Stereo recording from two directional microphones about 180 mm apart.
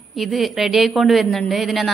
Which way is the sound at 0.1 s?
Centre (ahead or behind).